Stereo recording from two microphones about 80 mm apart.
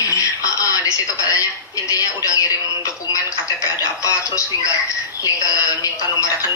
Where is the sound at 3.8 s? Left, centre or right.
Left.